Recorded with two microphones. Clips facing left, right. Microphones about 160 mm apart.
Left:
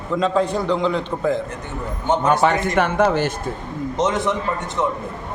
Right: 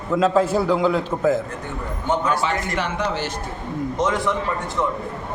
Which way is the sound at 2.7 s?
55° left (ahead or behind).